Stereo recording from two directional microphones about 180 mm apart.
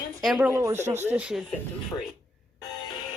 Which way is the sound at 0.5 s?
15° right (ahead or behind).